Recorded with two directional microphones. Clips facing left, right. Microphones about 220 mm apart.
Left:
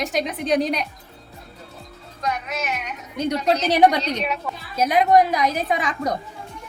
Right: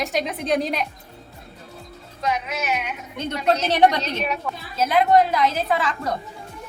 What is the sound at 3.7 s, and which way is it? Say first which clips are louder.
A woman's voice: left 3 dB; 10° left (ahead or behind).